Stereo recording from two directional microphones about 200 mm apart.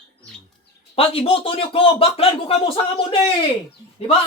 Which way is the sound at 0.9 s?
30° left (ahead or behind).